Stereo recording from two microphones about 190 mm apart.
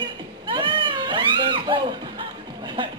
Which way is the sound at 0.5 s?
25° right (ahead or behind).